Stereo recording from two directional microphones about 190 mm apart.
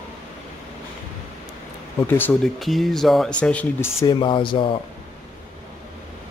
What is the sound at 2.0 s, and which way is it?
Speech, 10° left (ahead or behind).